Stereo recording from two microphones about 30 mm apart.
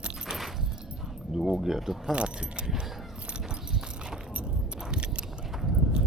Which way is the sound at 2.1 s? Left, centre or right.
Right.